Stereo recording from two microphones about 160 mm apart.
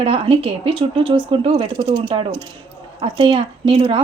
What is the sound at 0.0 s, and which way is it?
A woman's voice, 35° right (ahead or behind).